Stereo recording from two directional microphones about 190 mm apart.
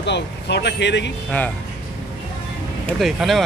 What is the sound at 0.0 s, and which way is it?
Speech, 65° left (ahead or behind).